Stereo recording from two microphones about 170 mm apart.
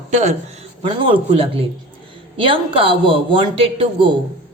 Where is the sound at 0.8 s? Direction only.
30° right (ahead or behind).